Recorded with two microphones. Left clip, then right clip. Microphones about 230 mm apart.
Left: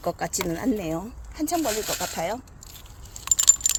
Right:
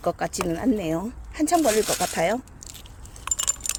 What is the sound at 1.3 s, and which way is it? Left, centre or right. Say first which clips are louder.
Speech: right 6 dB; right.